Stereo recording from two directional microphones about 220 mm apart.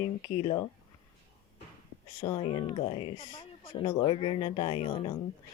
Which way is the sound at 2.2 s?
25° left (ahead or behind).